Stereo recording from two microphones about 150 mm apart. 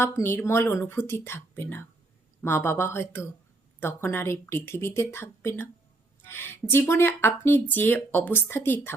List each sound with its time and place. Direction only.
0.0 s speech: 15° left (ahead or behind)